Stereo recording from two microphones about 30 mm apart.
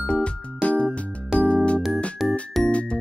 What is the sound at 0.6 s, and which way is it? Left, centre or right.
Music, left.